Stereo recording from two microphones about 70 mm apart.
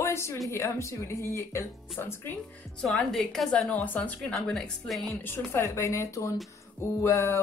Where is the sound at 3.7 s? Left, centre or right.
Left.